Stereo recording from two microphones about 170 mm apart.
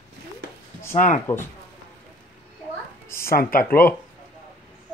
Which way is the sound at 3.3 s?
60° left (ahead or behind).